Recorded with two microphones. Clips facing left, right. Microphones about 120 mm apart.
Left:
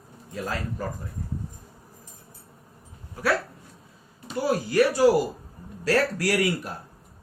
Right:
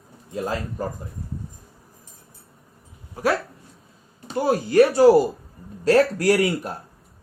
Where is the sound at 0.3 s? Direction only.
20° right (ahead or behind).